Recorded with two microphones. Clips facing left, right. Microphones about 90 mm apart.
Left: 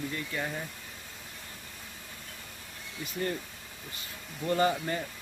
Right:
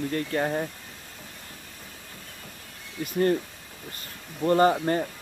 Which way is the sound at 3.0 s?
50° right (ahead or behind).